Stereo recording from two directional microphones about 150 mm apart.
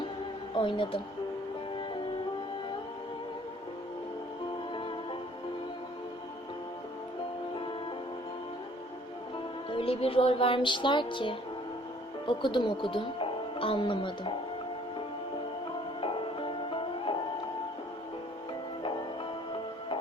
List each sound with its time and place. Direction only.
0.5 s a woman's voice: 35° left (ahead or behind)
9.6 s music: 35° left (ahead or behind)
12.2 s speech: 35° left (ahead or behind)
16.0 s music: 35° left (ahead or behind)